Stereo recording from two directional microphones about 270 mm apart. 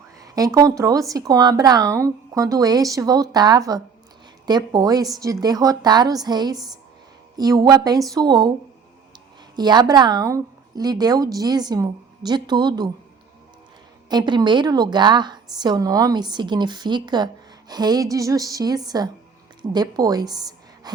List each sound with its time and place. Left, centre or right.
0.2 s a woman's voice: centre
9.6 s a woman's voice: centre
14.1 s a woman's voice: centre